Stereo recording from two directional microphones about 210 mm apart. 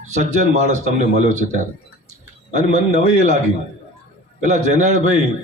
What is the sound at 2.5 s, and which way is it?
Speech, 35° right (ahead or behind).